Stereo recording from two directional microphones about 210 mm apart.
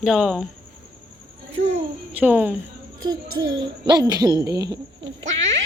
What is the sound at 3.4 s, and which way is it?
Speech, 20° right (ahead or behind).